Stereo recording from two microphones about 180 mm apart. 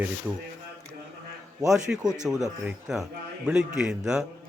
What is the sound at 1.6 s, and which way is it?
A man's voice, 5° right (ahead or behind).